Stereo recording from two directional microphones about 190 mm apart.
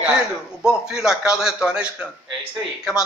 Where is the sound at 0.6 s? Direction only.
5° right (ahead or behind).